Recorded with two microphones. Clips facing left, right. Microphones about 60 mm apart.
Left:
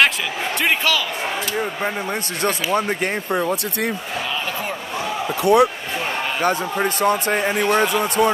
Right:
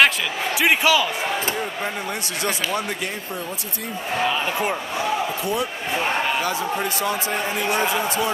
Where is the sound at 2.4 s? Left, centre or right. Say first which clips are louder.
Left 5 dB; left.